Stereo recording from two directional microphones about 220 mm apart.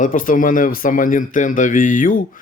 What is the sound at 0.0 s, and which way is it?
Speech, 35° left (ahead or behind).